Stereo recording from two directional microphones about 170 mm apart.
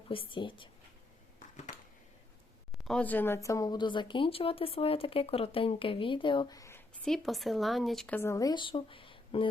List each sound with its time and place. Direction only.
0.1 s speech: 30° left (ahead or behind)
1.4 s a sound: 45° left (ahead or behind)
2.7 s speech: centre (ahead or behind); by 6.8 s 15° left (ahead or behind)
7.0 s speech: centre (ahead or behind); by 9.5 s 30° left (ahead or behind)